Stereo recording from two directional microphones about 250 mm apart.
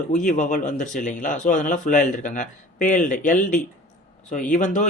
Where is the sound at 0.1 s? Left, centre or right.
Left.